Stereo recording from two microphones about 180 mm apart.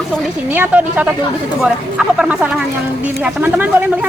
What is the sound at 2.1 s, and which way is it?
Speech, 5° right (ahead or behind).